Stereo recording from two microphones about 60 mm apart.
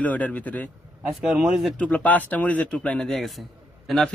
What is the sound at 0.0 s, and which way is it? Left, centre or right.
Speech, left.